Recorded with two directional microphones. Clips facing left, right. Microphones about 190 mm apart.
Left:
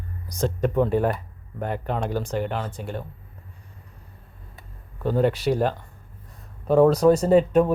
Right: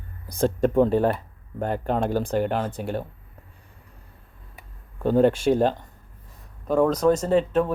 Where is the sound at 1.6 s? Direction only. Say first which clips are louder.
Right 3 dB; 35° right (ahead or behind).